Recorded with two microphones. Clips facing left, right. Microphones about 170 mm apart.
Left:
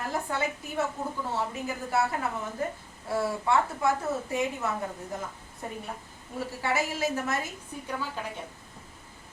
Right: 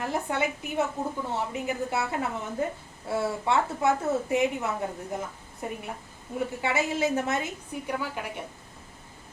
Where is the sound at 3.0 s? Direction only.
25° right (ahead or behind).